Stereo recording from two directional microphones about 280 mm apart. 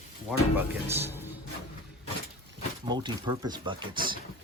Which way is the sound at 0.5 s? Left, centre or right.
Centre.